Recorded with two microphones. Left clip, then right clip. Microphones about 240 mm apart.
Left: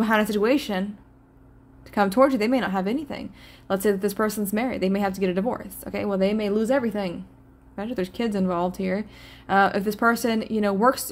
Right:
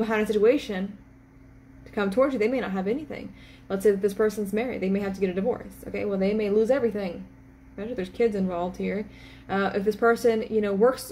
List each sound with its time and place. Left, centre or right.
0.0 s a woman's voice: left
2.0 s a woman's voice: left